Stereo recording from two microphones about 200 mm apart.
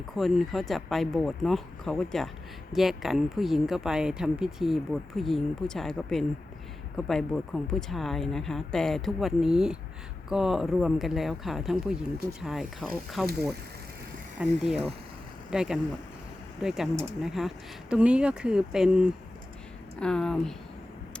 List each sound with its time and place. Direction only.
0.2 s speech: centre (ahead or behind)
14.3 s speech: 5° right (ahead or behind)